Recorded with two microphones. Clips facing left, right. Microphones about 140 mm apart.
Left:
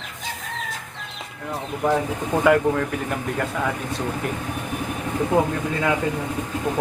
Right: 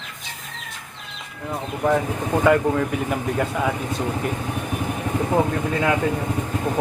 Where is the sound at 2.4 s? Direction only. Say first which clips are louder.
Even; centre (ahead or behind).